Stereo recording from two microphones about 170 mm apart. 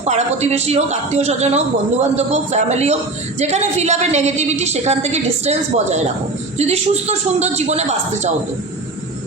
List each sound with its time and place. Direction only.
0.0 s speech: 40° right (ahead or behind)